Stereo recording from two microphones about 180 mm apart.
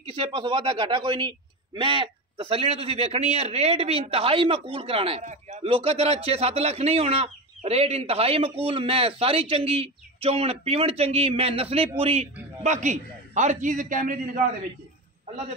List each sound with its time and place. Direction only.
0.0 s a man's voice: 30° right (ahead or behind); by 14.4 s 50° right (ahead or behind)